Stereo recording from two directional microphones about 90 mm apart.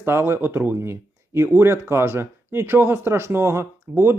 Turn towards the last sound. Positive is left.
turn(degrees=-30)  # may be behind; listen again after turning